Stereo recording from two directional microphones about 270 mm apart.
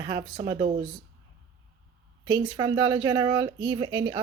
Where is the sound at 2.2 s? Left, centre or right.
Centre.